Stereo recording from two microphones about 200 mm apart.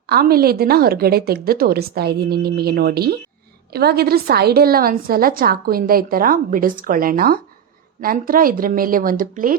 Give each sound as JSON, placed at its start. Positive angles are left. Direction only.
{"t": 0.1, "sound": "a woman's voice", "side_deg": -50}